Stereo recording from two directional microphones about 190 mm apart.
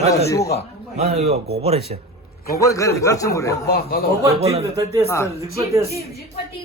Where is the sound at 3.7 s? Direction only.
55° left (ahead or behind).